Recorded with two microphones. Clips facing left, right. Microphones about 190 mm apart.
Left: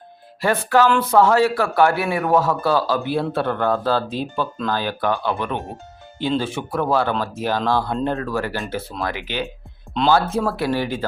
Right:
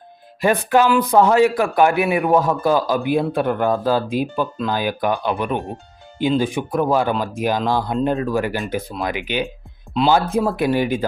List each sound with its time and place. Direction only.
0.4 s speech: 15° right (ahead or behind)
10.0 s speech: 5° right (ahead or behind)
10.3 s speech: 15° right (ahead or behind)